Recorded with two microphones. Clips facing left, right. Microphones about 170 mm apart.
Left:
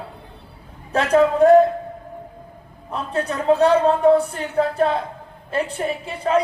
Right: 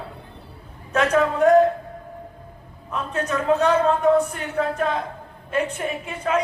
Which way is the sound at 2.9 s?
30° left (ahead or behind).